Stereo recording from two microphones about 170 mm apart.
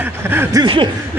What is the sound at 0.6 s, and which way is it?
Speech, 30° right (ahead or behind).